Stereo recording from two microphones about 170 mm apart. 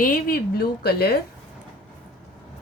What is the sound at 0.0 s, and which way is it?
A woman's voice, 60° left (ahead or behind).